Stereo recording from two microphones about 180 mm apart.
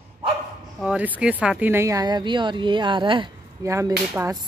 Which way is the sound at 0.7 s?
5° right (ahead or behind).